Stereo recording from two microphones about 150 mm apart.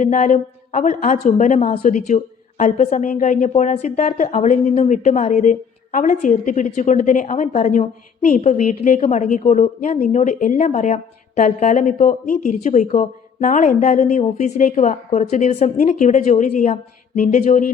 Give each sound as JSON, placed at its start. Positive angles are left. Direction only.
{"t": 0.0, "sound": "a woman's voice", "side_deg": 55}